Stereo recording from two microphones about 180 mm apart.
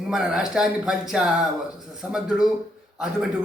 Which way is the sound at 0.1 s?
5° right (ahead or behind).